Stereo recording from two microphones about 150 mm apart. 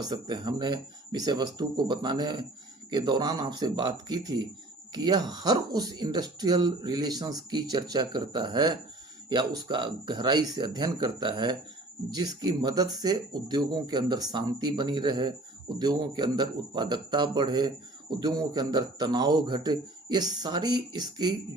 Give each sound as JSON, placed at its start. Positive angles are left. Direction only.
{"t": 0.0, "sound": "speech", "side_deg": -25}